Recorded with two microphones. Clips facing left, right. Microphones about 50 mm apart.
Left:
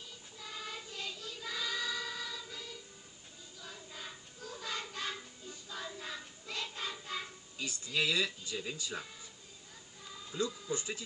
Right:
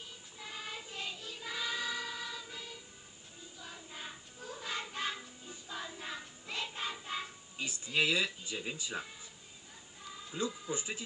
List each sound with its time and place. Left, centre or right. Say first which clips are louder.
0.4 s choir: even; right
3.6 s child singing: right 1 dB; right
4.9 s music: right 2 dB; right
10.3 s speech: left 1 dB; right